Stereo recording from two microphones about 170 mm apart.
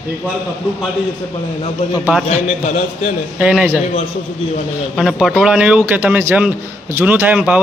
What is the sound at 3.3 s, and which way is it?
Speech, 5° right (ahead or behind).